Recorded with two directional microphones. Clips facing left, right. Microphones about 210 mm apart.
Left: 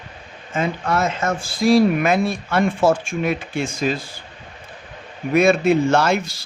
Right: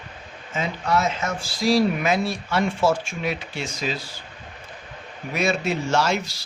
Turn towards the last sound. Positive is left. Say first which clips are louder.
# left 5 dB
turn(degrees=55)  # may be behind; listen again after turning